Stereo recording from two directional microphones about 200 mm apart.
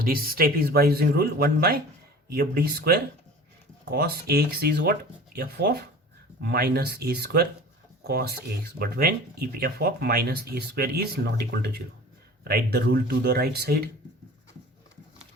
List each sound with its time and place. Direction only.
0.0 s speech: 45° right (ahead or behind)